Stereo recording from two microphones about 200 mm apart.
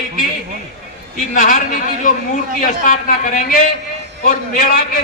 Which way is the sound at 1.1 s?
40° left (ahead or behind).